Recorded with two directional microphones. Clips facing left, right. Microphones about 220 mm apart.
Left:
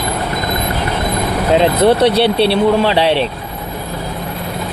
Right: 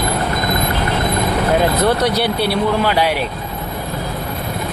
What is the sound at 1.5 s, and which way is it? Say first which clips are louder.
Speech: left 6 dB; 25° left (ahead or behind).